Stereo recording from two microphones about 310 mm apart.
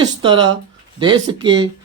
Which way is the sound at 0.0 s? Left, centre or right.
Centre.